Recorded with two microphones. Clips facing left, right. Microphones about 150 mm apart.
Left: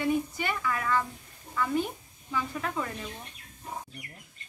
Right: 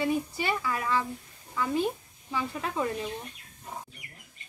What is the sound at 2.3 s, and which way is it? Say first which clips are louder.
Speech: even; 20° right (ahead or behind).